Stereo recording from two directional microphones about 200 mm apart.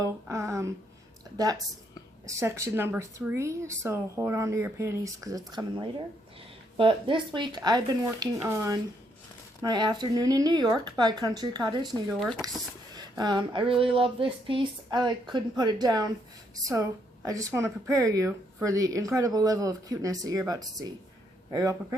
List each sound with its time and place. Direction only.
0.0 s a sound: 15° right (ahead or behind)
1.4 s speech: 20° right (ahead or behind)
11.9 s speech: centre (ahead or behind)
12.4 s speech: 20° right (ahead or behind)
17.2 s speech: 15° right (ahead or behind)